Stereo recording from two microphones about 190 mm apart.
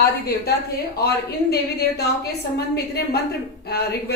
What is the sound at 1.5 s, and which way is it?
A woman's voice, 55° left (ahead or behind).